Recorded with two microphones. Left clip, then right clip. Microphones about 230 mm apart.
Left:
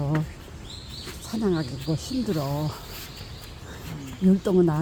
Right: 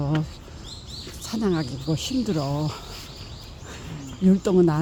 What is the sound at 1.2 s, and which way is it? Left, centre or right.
Speech, centre.